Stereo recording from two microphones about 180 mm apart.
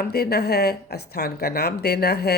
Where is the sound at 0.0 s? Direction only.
60° left (ahead or behind).